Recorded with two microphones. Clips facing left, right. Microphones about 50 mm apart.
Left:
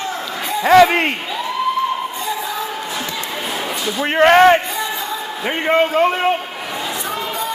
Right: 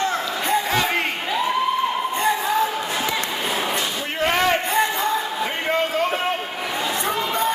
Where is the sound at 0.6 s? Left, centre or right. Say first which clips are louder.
Left 11 dB; left.